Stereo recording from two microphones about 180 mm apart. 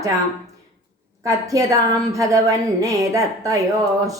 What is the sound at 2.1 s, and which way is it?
A woman's voice, 15° right (ahead or behind).